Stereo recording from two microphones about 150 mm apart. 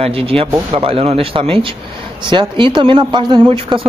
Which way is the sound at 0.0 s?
40° right (ahead or behind).